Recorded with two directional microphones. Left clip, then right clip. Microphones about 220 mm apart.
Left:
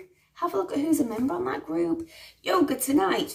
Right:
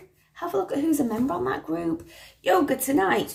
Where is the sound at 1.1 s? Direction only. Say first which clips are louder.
Right 2 dB; 15° left (ahead or behind).